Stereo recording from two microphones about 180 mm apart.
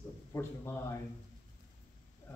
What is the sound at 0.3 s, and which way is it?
Speech, 15° left (ahead or behind).